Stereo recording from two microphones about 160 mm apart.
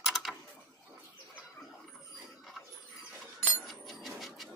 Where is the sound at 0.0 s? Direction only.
Centre (ahead or behind).